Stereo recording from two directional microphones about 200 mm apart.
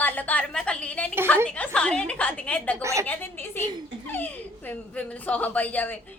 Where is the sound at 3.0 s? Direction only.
10° left (ahead or behind).